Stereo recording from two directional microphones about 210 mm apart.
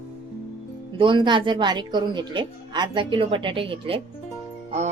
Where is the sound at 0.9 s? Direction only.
25° right (ahead or behind).